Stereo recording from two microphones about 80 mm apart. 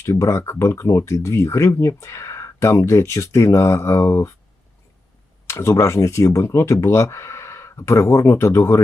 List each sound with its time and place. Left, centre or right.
0.0 s speech: left
5.5 s speech: left